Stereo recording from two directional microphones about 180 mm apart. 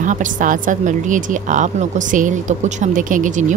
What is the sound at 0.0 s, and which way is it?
Speech, 45° right (ahead or behind).